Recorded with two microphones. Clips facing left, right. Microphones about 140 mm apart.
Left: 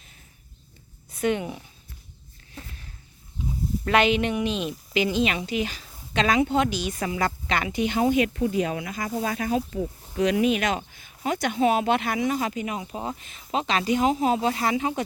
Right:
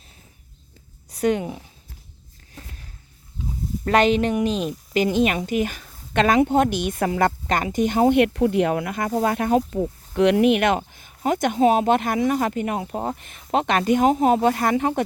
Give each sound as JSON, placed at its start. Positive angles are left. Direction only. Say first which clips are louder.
{"t": 1.1, "sound": "a woman's voice", "louder": "right 4 dB", "side_deg": -40}
{"t": 3.8, "sound": "a woman's voice", "louder": "right 3 dB", "side_deg": -40}
{"t": 10.2, "sound": "a woman's voice", "louder": "right 5 dB", "side_deg": -65}